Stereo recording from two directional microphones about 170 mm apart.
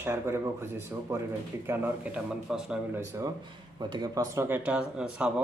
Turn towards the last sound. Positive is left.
turn(degrees=-5)  # may be behind; listen again after turning